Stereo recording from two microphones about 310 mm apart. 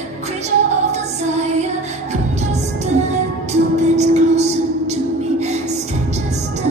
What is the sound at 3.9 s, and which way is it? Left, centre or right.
Music, right.